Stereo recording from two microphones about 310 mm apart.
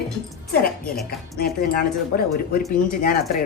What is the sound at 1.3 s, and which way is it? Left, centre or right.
A woman's voice, left.